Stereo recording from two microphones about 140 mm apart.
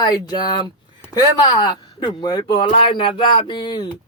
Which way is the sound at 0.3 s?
30° left (ahead or behind).